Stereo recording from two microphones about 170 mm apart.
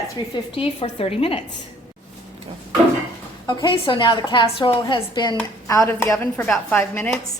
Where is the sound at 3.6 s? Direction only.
30° left (ahead or behind).